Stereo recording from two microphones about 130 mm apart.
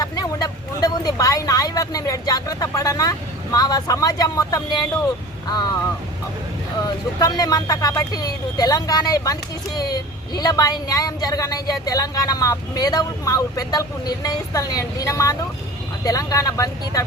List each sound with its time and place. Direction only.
0.0 s speech: 30° left (ahead or behind)
6.8 s speech: 30° left (ahead or behind)